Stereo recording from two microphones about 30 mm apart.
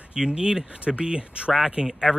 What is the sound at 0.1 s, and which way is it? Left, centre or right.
Speech, right.